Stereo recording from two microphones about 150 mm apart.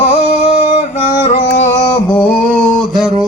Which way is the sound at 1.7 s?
20° left (ahead or behind).